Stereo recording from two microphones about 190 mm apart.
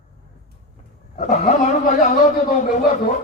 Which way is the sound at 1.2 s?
35° left (ahead or behind).